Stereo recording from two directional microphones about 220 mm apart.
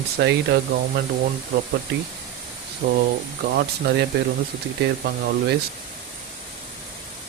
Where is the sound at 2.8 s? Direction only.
50° right (ahead or behind).